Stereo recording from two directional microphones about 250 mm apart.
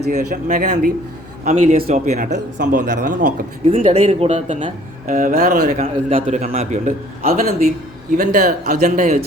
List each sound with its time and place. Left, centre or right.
0.1 s a man's voice: right